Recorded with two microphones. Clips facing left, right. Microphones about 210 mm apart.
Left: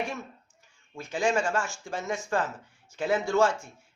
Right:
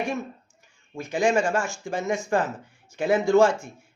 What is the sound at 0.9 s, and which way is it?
Speech, 15° right (ahead or behind).